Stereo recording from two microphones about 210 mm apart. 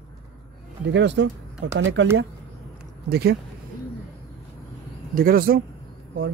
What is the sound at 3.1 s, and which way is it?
Speech, 50° right (ahead or behind).